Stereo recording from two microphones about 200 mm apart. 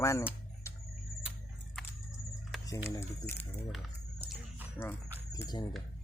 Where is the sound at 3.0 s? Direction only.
10° left (ahead or behind).